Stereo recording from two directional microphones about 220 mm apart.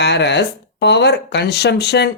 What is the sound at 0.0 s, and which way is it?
Speech, 50° left (ahead or behind).